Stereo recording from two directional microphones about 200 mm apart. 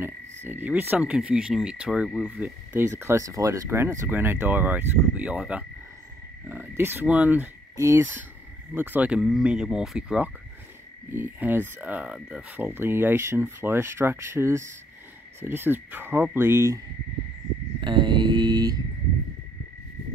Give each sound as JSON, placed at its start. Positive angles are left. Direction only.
{"t": 0.5, "sound": "speech", "side_deg": -10}
{"t": 6.8, "sound": "speech", "side_deg": -10}
{"t": 17.7, "sound": "a sound", "side_deg": -25}